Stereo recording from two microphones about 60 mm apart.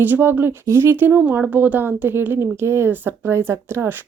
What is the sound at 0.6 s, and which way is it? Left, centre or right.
Speech, right.